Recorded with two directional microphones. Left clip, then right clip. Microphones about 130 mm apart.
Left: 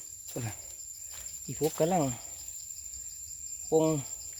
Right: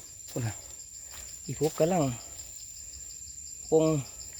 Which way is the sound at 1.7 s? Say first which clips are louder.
Right 2 dB; 15° right (ahead or behind).